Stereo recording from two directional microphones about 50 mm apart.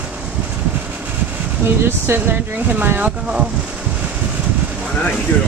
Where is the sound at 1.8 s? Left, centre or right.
Right.